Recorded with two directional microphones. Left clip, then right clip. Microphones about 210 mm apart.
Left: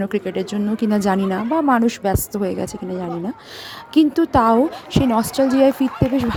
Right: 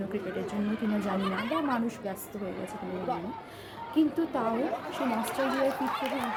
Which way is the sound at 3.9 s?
50° left (ahead or behind).